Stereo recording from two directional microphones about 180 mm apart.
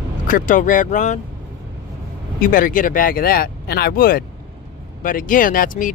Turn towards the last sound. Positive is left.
turn(degrees=50)  # may be behind; listen again after turning